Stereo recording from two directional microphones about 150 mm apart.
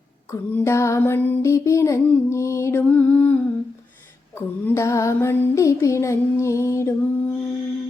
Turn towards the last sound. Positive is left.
turn(degrees=15)  # may be behind; listen again after turning